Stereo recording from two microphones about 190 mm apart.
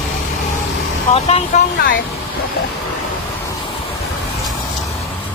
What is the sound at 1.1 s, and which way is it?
Speech, 35° left (ahead or behind).